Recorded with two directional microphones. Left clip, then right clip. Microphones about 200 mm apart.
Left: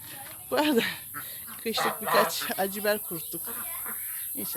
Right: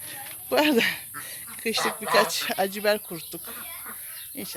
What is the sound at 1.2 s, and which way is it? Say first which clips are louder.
Speech: right 4 dB; 30° right (ahead or behind).